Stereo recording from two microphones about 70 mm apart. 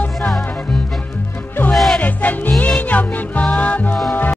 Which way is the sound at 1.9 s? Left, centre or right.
Left.